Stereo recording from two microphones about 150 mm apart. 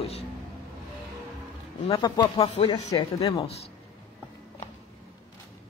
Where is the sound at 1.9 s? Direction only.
25° left (ahead or behind).